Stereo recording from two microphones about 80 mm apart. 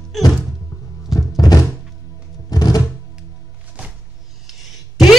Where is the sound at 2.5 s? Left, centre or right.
Left.